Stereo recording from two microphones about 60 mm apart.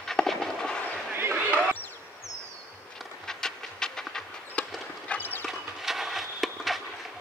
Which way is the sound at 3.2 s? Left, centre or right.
Centre.